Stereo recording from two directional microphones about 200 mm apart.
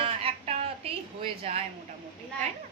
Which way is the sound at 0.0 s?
30° right (ahead or behind).